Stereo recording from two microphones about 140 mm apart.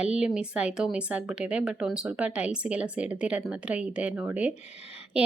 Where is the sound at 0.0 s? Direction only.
5° right (ahead or behind).